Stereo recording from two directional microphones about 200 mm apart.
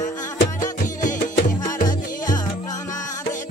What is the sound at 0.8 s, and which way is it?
Music, 40° left (ahead or behind).